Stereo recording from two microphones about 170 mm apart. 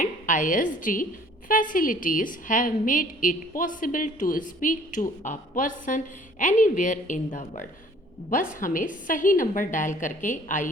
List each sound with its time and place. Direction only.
0.0 s a woman's voice: 50° left (ahead or behind)